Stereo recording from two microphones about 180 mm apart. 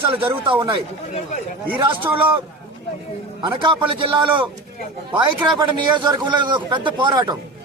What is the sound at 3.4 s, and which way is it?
A man's voice, 25° right (ahead or behind).